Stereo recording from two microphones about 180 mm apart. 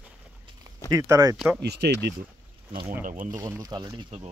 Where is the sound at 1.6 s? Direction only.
70° right (ahead or behind).